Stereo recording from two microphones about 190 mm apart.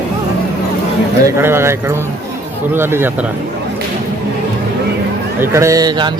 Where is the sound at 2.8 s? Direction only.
10° right (ahead or behind).